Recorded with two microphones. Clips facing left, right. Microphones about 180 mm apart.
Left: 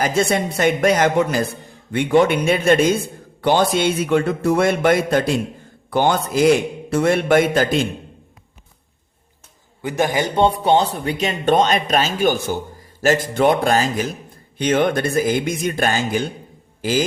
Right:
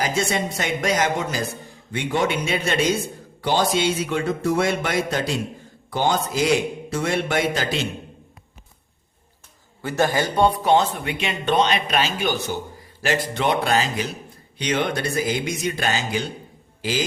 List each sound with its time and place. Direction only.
0.0 s speech: 55° left (ahead or behind)
9.8 s speech: 15° left (ahead or behind); by 17.1 s 50° left (ahead or behind)